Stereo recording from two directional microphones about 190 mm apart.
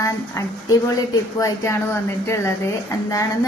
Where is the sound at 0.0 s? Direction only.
15° left (ahead or behind).